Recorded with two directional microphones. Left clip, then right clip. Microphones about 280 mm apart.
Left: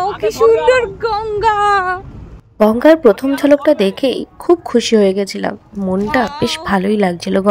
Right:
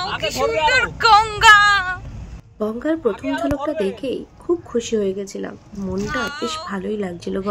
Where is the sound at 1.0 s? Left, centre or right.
Centre.